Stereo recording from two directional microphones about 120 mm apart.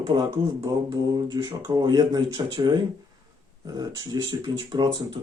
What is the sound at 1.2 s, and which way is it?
Speech, 35° right (ahead or behind).